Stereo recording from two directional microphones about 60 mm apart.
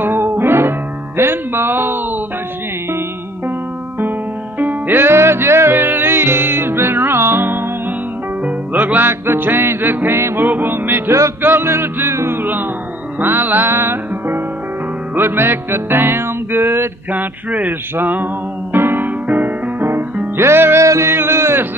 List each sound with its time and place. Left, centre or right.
0.0 s music: right
4.6 s music: right
8.5 s music: right
17.1 s speech: right
17.9 s music: right
20.8 s music: right
21.1 s a sound: right